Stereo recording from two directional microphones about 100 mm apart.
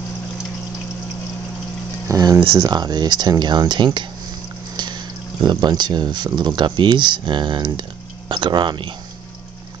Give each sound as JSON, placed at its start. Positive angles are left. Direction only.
{"t": 2.0, "sound": "speech", "side_deg": -35}